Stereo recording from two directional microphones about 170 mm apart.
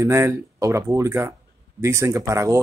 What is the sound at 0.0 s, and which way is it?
Speech, 15° right (ahead or behind).